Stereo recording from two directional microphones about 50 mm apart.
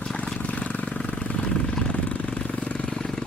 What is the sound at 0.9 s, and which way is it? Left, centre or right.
Vehicle, left.